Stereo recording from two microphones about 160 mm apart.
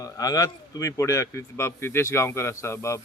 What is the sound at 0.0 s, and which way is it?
A man's voice, 20° left (ahead or behind).